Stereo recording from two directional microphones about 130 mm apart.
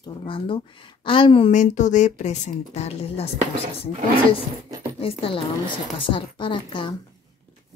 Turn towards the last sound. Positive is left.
turn(degrees=40)  # may be behind; listen again after turning